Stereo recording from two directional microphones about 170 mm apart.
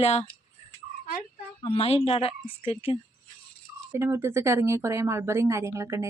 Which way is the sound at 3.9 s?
15° right (ahead or behind).